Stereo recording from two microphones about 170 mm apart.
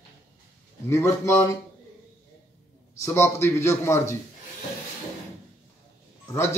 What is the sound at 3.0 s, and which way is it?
A man's voice, 15° left (ahead or behind).